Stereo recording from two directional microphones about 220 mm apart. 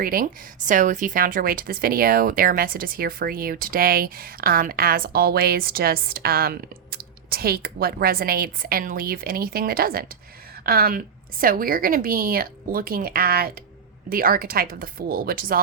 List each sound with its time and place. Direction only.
0.0 s a woman's voice: 40° right (ahead or behind)